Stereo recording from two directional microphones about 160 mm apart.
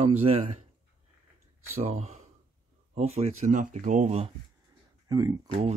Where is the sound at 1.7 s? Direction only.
45° right (ahead or behind).